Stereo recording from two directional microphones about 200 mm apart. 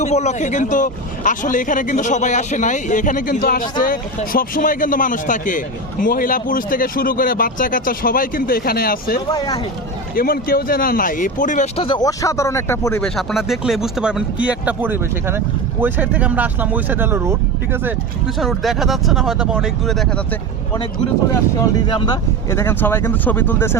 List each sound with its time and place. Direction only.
0.0 s speech: 35° left (ahead or behind)
9.3 s speech: 20° left (ahead or behind)
10.2 s speech: 50° left (ahead or behind)
11.8 s speech: 25° left (ahead or behind)
13.1 s speech: centre (ahead or behind)
21.6 s speech: 20° left (ahead or behind)